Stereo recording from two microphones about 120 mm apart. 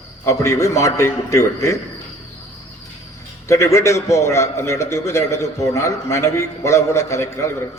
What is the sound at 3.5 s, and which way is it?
A man's voice, 25° left (ahead or behind).